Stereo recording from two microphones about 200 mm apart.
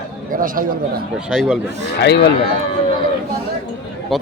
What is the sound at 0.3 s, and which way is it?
Speech, 45° right (ahead or behind).